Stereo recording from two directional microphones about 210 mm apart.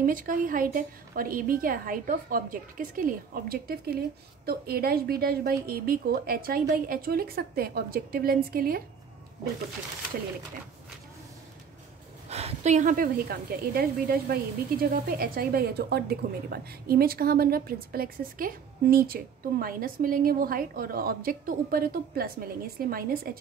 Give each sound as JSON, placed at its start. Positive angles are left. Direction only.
{"t": 0.0, "sound": "a woman's voice", "side_deg": -40}
{"t": 12.3, "sound": "a woman's voice", "side_deg": -30}